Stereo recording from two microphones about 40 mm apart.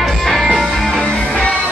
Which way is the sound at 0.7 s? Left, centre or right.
Centre.